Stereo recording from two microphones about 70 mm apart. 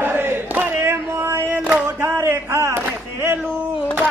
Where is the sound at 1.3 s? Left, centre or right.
Right.